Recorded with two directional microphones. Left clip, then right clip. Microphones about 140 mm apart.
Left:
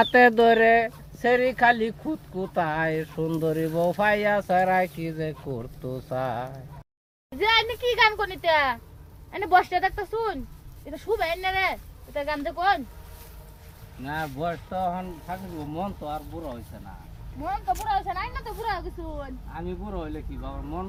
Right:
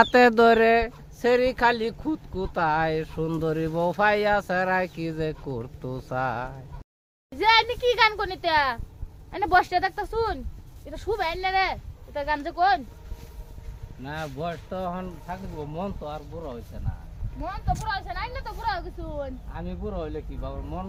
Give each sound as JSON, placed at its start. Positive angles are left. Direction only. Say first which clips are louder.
{"t": 0.0, "sound": "speech", "louder": "even", "side_deg": -35}
{"t": 14.0, "sound": "speech", "louder": "left 3 dB", "side_deg": 10}
{"t": 15.3, "sound": "speech", "louder": "even", "side_deg": -25}
{"t": 17.7, "sound": "speech", "louder": "left 4 dB", "side_deg": -20}
{"t": 19.2, "sound": "speech", "louder": "right 1 dB", "side_deg": -30}